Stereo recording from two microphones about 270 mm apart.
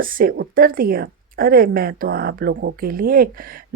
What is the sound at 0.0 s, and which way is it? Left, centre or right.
Speech, right.